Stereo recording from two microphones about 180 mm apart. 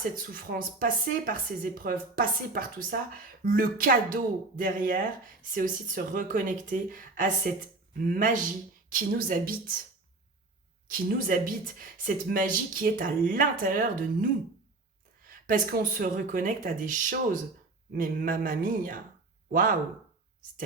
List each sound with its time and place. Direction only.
0.2 s speech: 50° right (ahead or behind)
10.8 s speech: 50° right (ahead or behind)
15.3 s speech: 50° right (ahead or behind)